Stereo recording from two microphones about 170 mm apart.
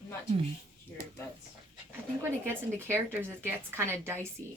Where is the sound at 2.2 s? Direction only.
15° right (ahead or behind).